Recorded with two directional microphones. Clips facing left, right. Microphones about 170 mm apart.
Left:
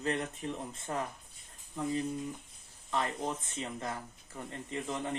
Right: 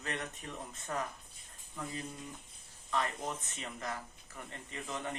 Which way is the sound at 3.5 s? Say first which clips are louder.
Left 3 dB; 25° left (ahead or behind).